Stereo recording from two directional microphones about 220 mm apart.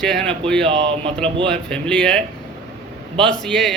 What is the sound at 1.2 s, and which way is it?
Speech, 25° right (ahead or behind).